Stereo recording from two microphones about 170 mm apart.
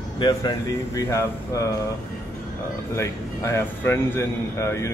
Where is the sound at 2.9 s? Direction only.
15° left (ahead or behind).